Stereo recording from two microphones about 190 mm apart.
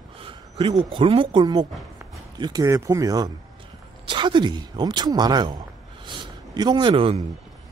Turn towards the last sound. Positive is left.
turn(degrees=-30)  # may be behind; listen again after turning